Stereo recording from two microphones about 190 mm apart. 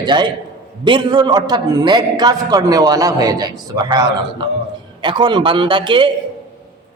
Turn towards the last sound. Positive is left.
turn(degrees=-25)  # may be behind; listen again after turning